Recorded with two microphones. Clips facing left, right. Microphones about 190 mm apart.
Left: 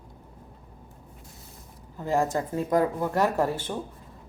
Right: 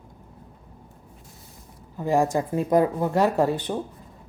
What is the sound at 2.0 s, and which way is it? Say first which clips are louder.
Speech: right 4 dB; 15° right (ahead or behind).